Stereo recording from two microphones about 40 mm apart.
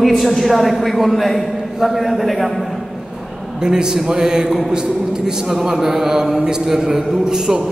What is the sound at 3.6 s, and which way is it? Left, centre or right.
Mantra, centre.